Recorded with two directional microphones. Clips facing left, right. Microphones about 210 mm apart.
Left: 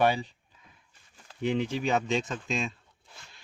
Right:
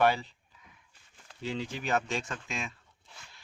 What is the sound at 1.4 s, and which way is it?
Speech, 20° left (ahead or behind).